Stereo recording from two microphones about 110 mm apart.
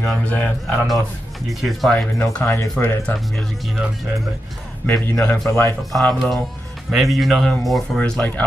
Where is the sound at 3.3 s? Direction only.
Centre (ahead or behind).